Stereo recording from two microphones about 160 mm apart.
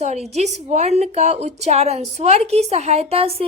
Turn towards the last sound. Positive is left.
turn(degrees=-40)  # may be behind; listen again after turning